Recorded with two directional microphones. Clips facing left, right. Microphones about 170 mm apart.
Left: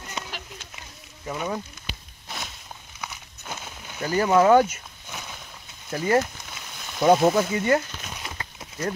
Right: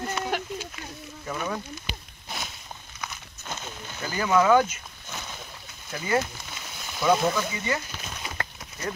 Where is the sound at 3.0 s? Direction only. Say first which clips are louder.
Left 1 dB; 10° left (ahead or behind).